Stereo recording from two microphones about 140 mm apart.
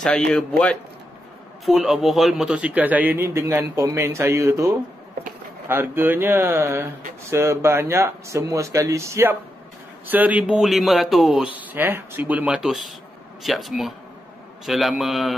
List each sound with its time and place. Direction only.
0.0 s a man's voice: 5° left (ahead or behind)
11.5 s a man's voice: 10° right (ahead or behind)